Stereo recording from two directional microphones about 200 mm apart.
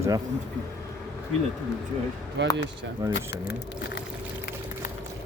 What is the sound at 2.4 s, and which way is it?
Speech, 60° right (ahead or behind).